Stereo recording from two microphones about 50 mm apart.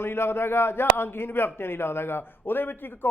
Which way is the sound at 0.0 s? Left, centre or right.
Left.